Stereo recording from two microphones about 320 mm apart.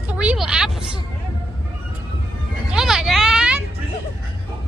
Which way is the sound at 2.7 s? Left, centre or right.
Centre.